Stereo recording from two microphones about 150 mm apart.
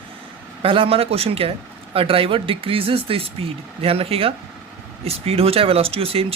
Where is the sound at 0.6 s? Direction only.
35° right (ahead or behind).